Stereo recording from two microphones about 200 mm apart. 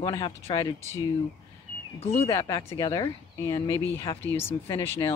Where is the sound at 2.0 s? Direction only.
30° left (ahead or behind).